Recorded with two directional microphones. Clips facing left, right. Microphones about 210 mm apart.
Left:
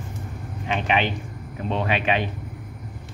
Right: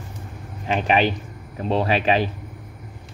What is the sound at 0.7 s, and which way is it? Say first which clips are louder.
Speech: right 4 dB; 40° right (ahead or behind).